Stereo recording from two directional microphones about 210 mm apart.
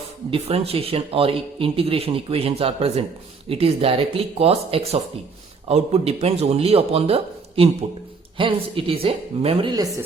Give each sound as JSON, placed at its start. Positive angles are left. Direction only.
{"t": 0.3, "sound": "speech", "side_deg": -25}